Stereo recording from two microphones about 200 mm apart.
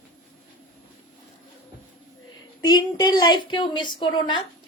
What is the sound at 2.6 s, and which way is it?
A woman's voice, 20° left (ahead or behind).